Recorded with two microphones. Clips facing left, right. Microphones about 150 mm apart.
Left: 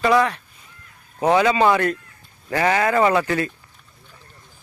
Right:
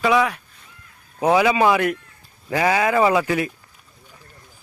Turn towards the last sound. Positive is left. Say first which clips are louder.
# even
turn(degrees=-10)  # may be behind; listen again after turning